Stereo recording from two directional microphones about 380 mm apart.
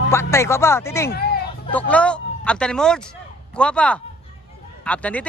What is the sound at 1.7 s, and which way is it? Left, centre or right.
Speech, centre.